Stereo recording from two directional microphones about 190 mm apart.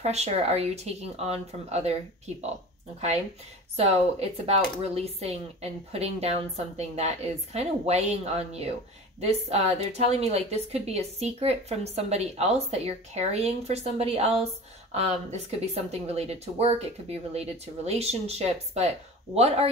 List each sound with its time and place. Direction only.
0.0 s a woman's voice: 35° right (ahead or behind)
3.7 s a woman's voice: 35° right (ahead or behind)